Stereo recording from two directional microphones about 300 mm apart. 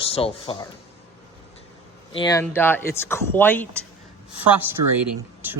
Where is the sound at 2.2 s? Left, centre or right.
Centre.